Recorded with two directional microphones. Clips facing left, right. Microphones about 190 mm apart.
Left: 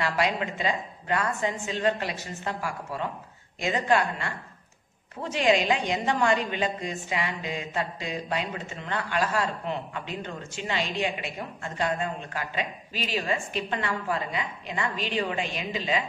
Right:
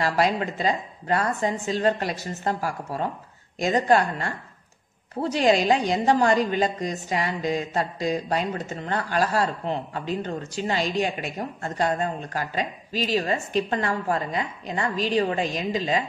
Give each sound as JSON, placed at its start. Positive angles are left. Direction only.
{"t": 0.0, "sound": "a woman's voice", "side_deg": -40}